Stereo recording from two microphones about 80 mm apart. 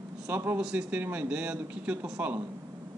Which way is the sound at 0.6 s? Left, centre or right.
Centre.